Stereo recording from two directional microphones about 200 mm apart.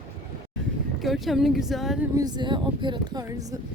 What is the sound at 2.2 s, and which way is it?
Speech, 20° right (ahead or behind).